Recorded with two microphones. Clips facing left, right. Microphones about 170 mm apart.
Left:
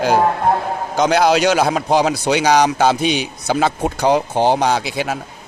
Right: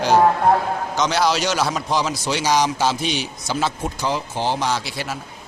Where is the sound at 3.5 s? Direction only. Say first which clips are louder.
Left 6 dB; 55° left (ahead or behind).